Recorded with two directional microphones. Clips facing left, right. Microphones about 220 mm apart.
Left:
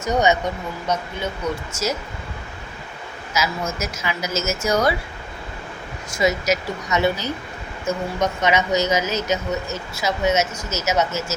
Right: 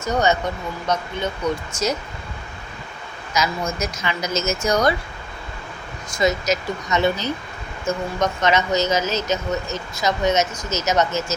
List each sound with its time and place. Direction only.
0.0 s speech: 15° left (ahead or behind)
3.3 s speech: 5° left (ahead or behind)
6.1 s speech: 10° left (ahead or behind)